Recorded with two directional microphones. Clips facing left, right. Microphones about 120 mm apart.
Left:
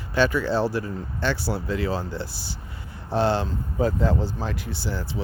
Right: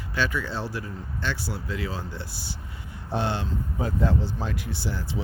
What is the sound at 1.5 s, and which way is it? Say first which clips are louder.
Speech: left 6 dB; 35° left (ahead or behind).